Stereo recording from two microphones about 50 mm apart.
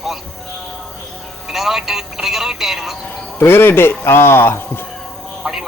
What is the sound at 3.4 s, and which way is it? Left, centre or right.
Speech, left.